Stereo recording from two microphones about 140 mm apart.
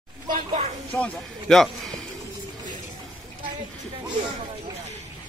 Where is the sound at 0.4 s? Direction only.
50° right (ahead or behind).